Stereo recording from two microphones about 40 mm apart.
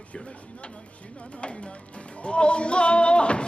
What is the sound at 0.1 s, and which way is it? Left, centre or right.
Music, left.